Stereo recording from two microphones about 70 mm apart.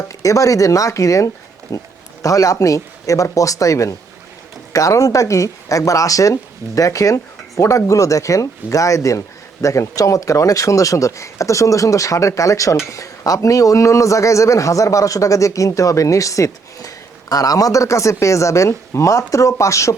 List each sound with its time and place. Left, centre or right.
0.0 s speech: left